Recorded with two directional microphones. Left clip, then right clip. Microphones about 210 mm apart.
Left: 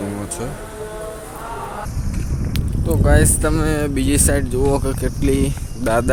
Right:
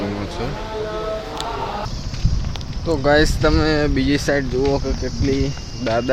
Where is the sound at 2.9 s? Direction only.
5° left (ahead or behind).